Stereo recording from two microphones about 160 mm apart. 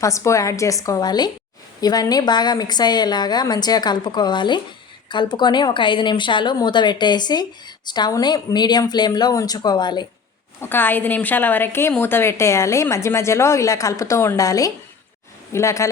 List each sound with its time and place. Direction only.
0.0 s a woman's voice: 20° left (ahead or behind)
10.6 s a woman's voice: 15° left (ahead or behind)